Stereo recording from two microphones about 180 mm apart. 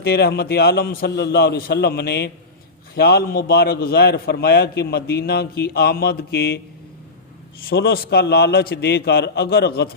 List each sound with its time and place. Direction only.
0.0 s a man's voice: 60° left (ahead or behind)
7.7 s a man's voice: 60° left (ahead or behind)